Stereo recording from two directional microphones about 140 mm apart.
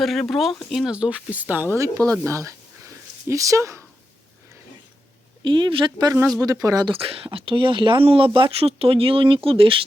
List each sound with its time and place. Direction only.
0.0 s speech: centre (ahead or behind); by 3.8 s 20° right (ahead or behind)
5.4 s speech: 35° right (ahead or behind)
6.9 s speech: 45° right (ahead or behind)